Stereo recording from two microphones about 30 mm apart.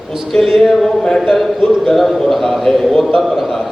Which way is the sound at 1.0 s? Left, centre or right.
Centre.